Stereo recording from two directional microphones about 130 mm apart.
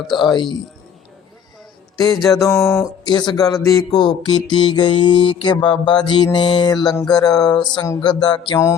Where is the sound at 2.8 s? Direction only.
35° left (ahead or behind).